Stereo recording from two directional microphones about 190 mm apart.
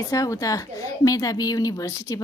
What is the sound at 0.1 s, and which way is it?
A woman's voice, 15° left (ahead or behind).